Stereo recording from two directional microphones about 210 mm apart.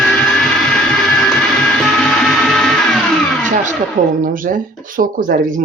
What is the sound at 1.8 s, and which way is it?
Music, centre (ahead or behind).